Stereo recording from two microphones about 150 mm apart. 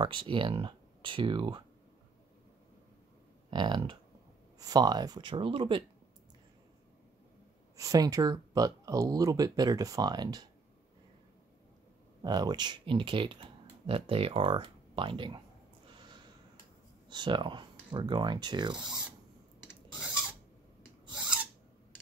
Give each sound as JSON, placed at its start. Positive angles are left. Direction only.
{"t": 0.0, "sound": "speech", "side_deg": -35}
{"t": 3.4, "sound": "speech", "side_deg": -30}
{"t": 7.7, "sound": "speech", "side_deg": -20}
{"t": 12.2, "sound": "speech", "side_deg": -25}
{"t": 17.1, "sound": "speech", "side_deg": -30}